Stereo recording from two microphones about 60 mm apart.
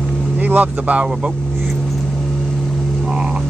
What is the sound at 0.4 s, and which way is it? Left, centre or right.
Speech, right.